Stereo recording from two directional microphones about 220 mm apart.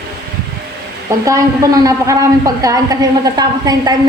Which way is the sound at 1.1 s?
15° right (ahead or behind).